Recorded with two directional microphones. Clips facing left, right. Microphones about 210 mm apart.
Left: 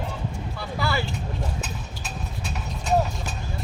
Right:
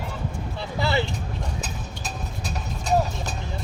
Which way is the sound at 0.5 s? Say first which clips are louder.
Right 3 dB; 20° right (ahead or behind).